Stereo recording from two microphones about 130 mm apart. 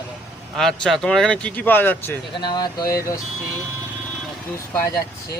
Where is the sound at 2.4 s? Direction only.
35° left (ahead or behind).